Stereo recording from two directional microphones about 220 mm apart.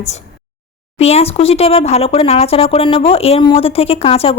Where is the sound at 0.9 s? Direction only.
30° left (ahead or behind).